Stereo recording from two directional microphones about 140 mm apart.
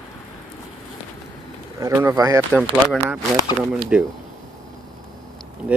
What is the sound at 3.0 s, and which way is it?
Speech, 10° right (ahead or behind).